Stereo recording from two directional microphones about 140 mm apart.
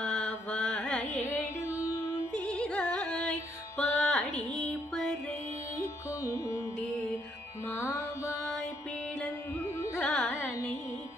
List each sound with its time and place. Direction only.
0.0 s music: 5° left (ahead or behind)
2.3 s carnatic music: 10° left (ahead or behind)
6.2 s music: 20° left (ahead or behind)
7.7 s music: 20° left (ahead or behind)
9.9 s carnatic music: 10° left (ahead or behind)